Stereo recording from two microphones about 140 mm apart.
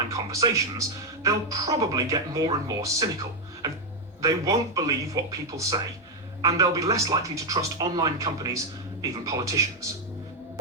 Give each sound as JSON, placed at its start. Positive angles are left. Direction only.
{"t": 0.1, "sound": "speech", "side_deg": -25}